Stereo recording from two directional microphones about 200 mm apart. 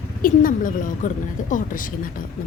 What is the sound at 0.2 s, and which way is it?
A woman's voice, 45° left (ahead or behind).